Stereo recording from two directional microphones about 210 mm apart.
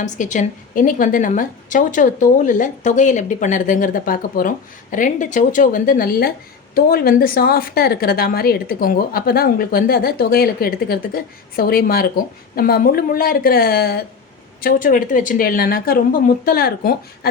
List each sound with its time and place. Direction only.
0.0 s a woman's voice: 35° left (ahead or behind)